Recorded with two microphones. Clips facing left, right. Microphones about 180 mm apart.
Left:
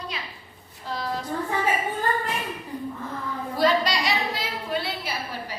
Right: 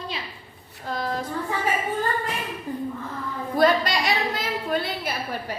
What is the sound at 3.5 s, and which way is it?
A woman's voice, 50° right (ahead or behind).